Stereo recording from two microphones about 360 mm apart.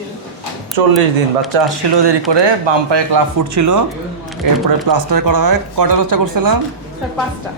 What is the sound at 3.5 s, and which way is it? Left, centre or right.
Speech, right.